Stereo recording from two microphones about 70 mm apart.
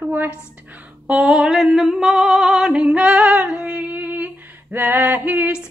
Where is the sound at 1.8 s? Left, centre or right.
Centre; by 4.3 s right.